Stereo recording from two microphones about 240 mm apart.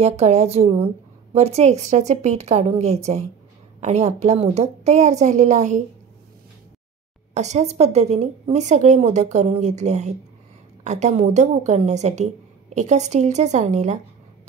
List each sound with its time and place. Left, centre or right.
0.0 s a woman's voice: right
7.3 s a woman's voice: right